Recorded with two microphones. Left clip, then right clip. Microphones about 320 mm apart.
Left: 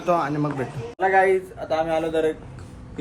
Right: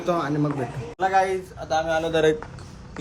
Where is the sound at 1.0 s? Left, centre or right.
Centre.